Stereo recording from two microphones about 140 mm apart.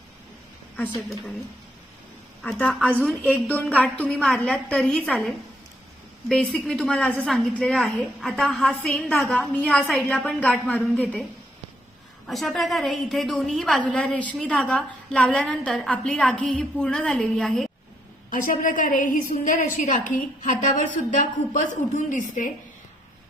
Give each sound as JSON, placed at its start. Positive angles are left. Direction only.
{"t": 2.4, "sound": "a woman's voice", "side_deg": 10}
{"t": 12.3, "sound": "a woman's voice", "side_deg": 0}
{"t": 18.3, "sound": "a woman's voice", "side_deg": 70}